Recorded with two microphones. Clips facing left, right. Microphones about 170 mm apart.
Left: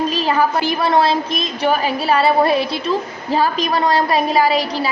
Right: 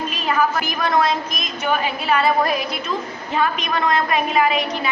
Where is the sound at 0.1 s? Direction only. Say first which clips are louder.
Left 3 dB; 30° left (ahead or behind).